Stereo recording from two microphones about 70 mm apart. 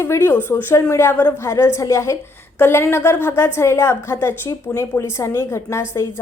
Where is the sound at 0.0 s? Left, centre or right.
Left.